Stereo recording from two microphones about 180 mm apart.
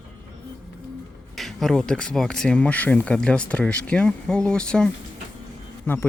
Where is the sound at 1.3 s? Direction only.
Centre (ahead or behind).